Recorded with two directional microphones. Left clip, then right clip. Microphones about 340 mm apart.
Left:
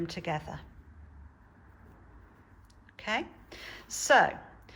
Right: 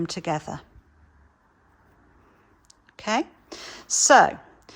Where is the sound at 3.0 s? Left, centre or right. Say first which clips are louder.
Right 7 dB; centre.